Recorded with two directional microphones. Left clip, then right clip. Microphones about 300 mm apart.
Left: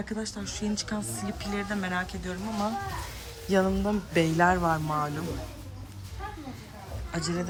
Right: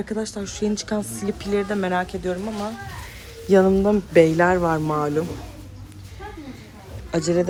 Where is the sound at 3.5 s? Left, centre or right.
Centre.